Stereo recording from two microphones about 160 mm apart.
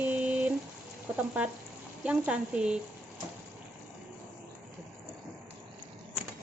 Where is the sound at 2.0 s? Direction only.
5° right (ahead or behind).